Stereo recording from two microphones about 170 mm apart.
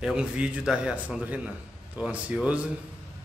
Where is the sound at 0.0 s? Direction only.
5° right (ahead or behind).